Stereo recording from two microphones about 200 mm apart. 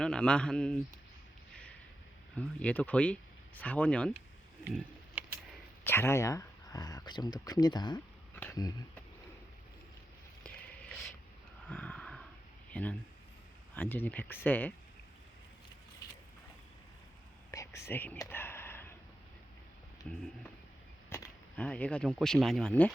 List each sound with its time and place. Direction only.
0.0 s a man's voice: 5° left (ahead or behind)
2.3 s speech: 5° left (ahead or behind)
4.6 s a sound: 10° right (ahead or behind)
5.8 s speech: 10° left (ahead or behind)
11.7 s a sound: 5° left (ahead or behind)
12.7 s speech: 5° left (ahead or behind)
17.5 s whispering: 15° left (ahead or behind)
20.1 s a man's voice: 5° left (ahead or behind)